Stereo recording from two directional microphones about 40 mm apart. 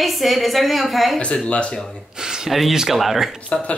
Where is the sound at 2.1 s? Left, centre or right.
Centre.